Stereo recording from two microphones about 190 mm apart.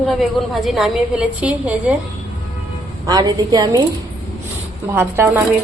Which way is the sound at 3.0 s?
20° right (ahead or behind).